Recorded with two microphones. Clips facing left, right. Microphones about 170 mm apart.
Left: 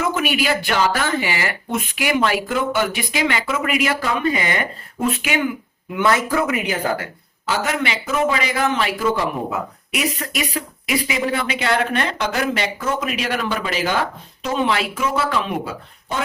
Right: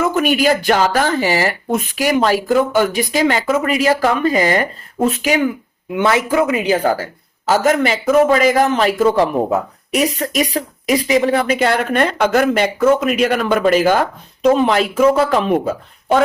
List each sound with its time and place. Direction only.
0.1 s speech: 45° right (ahead or behind)
5.9 s speech: 20° right (ahead or behind); by 15.7 s 45° right (ahead or behind)